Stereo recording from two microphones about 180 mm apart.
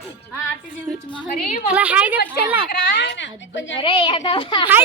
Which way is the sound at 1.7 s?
5° right (ahead or behind).